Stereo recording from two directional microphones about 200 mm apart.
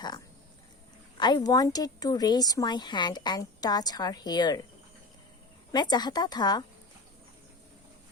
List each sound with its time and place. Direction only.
1.2 s speech: 20° left (ahead or behind)
5.7 s speech: 20° left (ahead or behind)